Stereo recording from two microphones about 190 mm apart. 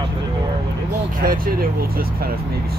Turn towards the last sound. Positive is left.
turn(degrees=-50)  # may be behind; listen again after turning